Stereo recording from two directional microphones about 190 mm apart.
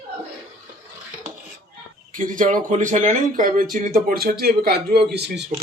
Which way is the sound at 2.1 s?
45° right (ahead or behind).